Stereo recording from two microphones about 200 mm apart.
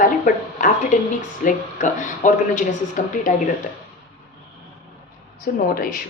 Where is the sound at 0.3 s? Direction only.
40° left (ahead or behind).